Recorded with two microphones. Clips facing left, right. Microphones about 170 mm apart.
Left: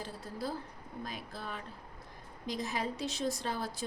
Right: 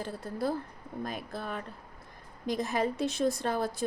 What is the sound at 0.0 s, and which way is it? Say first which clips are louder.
A woman's voice: right 6 dB; 55° right (ahead or behind).